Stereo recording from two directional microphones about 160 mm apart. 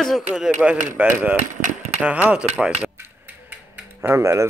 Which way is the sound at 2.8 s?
10° right (ahead or behind).